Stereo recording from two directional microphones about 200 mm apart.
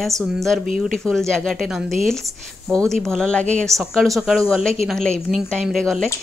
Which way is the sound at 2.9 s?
Centre (ahead or behind).